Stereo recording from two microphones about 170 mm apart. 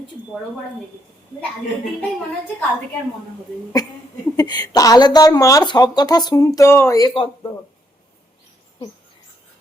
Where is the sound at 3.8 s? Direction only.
25° left (ahead or behind).